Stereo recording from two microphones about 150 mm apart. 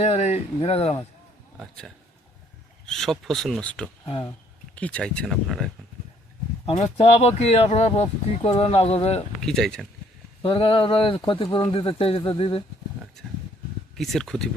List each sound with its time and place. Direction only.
0.0 s speech: 45° left (ahead or behind)
1.5 s speech: 5° left (ahead or behind)
4.0 s speech: 35° left (ahead or behind)
4.7 s speech: 10° left (ahead or behind)
6.7 s speech: 40° left (ahead or behind)
9.4 s speech: centre (ahead or behind)
10.4 s speech: 35° left (ahead or behind)
13.9 s speech: centre (ahead or behind)